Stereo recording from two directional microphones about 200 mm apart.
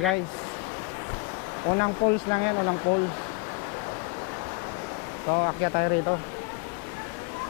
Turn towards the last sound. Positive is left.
turn(degrees=20)  # may be behind; listen again after turning